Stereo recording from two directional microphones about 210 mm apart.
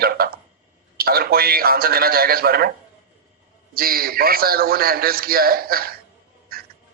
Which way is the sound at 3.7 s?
45° right (ahead or behind).